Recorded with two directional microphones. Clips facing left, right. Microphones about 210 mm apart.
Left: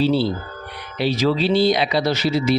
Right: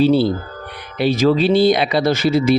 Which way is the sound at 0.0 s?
50° right (ahead or behind).